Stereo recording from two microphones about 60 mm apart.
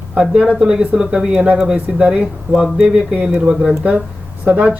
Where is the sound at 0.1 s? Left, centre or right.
Right.